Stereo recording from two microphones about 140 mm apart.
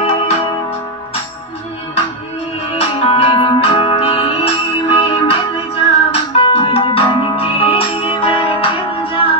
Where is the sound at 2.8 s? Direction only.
40° left (ahead or behind).